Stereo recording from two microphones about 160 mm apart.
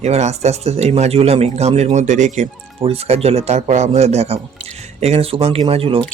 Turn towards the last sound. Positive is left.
turn(degrees=-35)  # may be behind; listen again after turning